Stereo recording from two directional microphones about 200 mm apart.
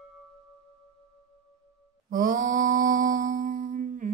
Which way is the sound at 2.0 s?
45° right (ahead or behind).